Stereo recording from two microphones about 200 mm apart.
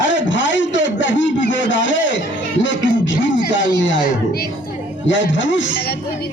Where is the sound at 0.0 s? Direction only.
65° left (ahead or behind).